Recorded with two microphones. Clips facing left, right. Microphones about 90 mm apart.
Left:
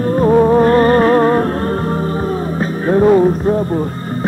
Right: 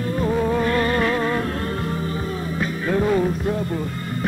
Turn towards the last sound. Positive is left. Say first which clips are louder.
# left 10 dB
turn(degrees=35)  # may be behind; listen again after turning